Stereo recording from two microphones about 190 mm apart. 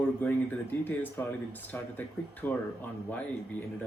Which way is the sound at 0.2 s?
10° left (ahead or behind).